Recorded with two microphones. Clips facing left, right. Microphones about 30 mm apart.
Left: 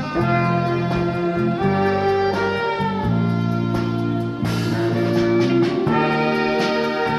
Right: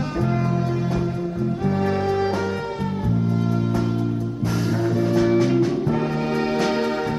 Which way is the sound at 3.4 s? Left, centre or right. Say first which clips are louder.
Left 1 dB; left.